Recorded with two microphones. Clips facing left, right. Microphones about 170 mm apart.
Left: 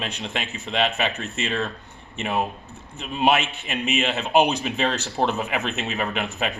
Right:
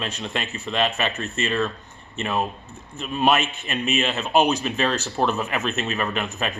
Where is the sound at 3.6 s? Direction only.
15° left (ahead or behind).